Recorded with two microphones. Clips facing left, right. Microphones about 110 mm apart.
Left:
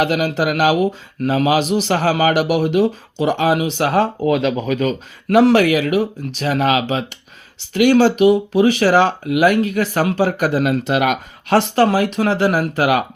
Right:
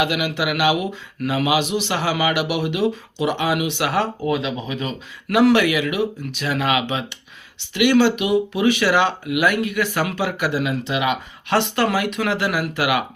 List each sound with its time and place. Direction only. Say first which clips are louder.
0.0 s speech: left 4 dB; 40° left (ahead or behind)
4.4 s speech: left 7 dB; 55° left (ahead or behind)
5.3 s speech: left 4 dB; 35° left (ahead or behind)